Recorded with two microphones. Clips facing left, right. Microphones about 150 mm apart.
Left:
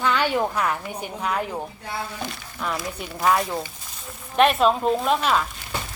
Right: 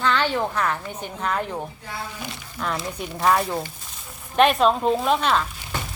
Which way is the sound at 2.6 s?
5° left (ahead or behind).